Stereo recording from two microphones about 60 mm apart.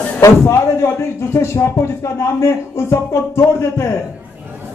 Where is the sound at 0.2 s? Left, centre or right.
Left.